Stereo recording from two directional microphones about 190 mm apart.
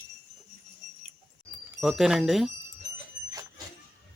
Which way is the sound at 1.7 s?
Centre (ahead or behind).